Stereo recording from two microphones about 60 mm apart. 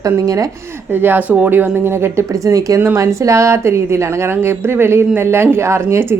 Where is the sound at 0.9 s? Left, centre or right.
Right.